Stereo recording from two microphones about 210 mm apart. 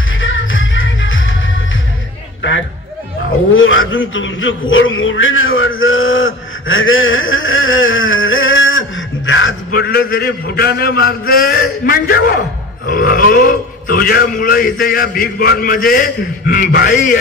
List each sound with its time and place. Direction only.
0.2 s music: 65° left (ahead or behind)
3.5 s a man's voice: 70° left (ahead or behind)
9.7 s a man's voice: 45° left (ahead or behind)